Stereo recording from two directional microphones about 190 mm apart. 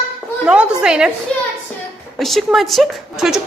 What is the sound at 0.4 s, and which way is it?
Speech, 5° right (ahead or behind).